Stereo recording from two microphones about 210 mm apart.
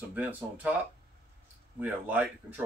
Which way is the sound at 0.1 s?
10° right (ahead or behind).